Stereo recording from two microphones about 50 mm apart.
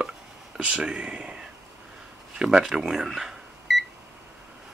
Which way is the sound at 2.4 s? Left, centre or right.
Centre.